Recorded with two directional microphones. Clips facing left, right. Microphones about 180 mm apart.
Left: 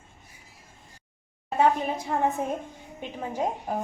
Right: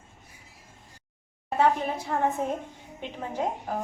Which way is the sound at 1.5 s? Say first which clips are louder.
Left 1 dB; 15° left (ahead or behind).